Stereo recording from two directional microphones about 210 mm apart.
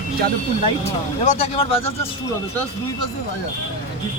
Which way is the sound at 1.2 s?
30° left (ahead or behind).